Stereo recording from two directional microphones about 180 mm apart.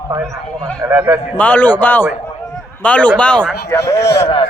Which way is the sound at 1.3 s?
10° left (ahead or behind).